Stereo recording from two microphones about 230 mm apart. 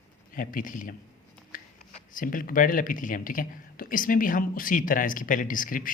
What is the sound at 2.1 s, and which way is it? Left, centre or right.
Speech, left.